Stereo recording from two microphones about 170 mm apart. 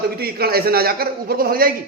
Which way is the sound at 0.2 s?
65° right (ahead or behind).